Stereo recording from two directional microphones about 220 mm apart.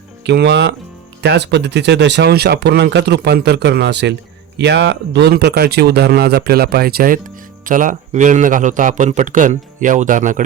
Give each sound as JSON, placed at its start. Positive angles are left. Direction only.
{"t": 0.3, "sound": "speech", "side_deg": -50}